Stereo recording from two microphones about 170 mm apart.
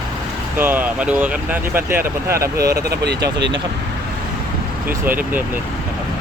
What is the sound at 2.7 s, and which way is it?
Speech, 75° right (ahead or behind).